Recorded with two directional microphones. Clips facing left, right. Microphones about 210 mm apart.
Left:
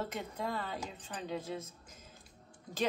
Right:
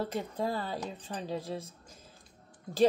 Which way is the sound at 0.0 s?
35° right (ahead or behind).